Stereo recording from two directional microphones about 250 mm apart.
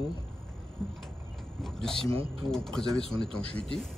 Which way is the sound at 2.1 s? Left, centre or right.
Right.